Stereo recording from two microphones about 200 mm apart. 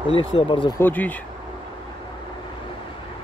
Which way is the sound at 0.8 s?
10° left (ahead or behind).